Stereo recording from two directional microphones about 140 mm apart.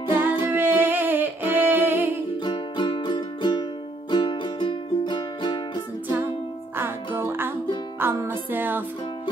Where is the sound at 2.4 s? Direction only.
35° left (ahead or behind).